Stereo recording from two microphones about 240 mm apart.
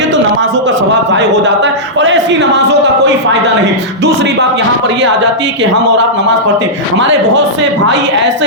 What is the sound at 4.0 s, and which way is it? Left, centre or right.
A man's voice, right.